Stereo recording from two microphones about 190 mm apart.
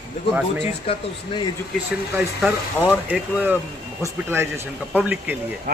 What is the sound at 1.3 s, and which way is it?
Speech, 25° left (ahead or behind).